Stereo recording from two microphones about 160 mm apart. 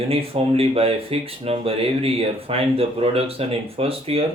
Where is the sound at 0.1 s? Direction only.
35° right (ahead or behind).